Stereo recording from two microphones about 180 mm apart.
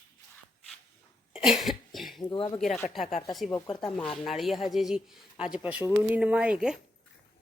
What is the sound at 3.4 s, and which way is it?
Speech, 20° left (ahead or behind).